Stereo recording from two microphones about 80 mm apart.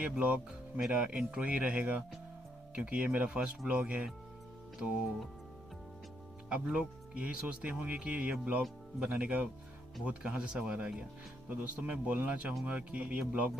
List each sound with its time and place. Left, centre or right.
0.0 s speech: centre
6.5 s speech: centre